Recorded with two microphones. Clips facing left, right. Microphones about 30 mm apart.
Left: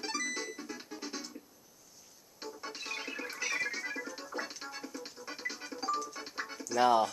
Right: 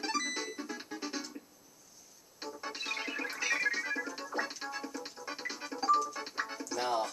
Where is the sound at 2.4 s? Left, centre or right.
Centre.